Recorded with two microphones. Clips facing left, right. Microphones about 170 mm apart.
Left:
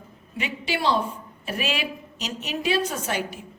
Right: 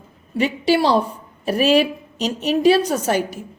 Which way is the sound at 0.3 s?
35° right (ahead or behind).